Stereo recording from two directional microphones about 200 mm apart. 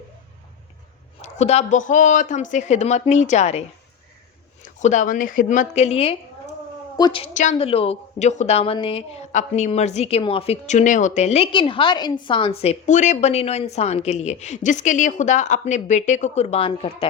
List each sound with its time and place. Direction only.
1.2 s a woman's voice: 35° left (ahead or behind)
4.6 s a woman's voice: 35° left (ahead or behind)